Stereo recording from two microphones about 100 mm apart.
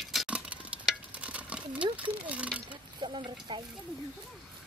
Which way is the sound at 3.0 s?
55° right (ahead or behind).